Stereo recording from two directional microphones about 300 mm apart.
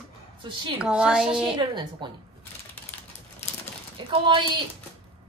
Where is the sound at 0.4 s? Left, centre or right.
Centre.